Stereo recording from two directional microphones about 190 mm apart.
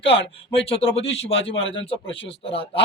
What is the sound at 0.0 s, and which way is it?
Speech, 30° left (ahead or behind).